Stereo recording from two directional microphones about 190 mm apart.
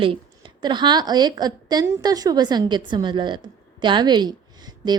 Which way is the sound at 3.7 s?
25° right (ahead or behind).